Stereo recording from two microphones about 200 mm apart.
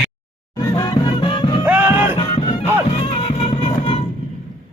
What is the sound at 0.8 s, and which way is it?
Music, 25° left (ahead or behind).